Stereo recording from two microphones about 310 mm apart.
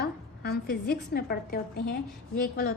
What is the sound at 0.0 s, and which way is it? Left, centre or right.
A woman's voice, left.